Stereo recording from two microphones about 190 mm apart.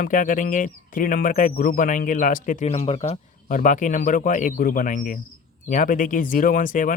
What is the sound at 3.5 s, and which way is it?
Speech, 45° left (ahead or behind).